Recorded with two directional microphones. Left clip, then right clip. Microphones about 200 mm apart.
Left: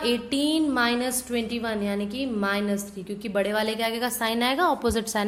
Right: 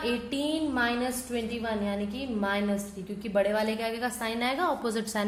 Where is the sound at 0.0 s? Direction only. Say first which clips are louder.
Left 5 dB; 50° left (ahead or behind).